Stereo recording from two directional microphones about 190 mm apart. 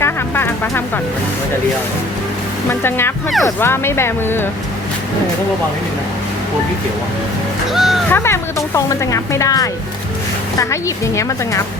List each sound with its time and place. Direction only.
0.0 s music: 10° left (ahead or behind)
2.6 s speech: 10° left (ahead or behind)
7.7 s speech: centre (ahead or behind)
8.1 s speech: 15° left (ahead or behind)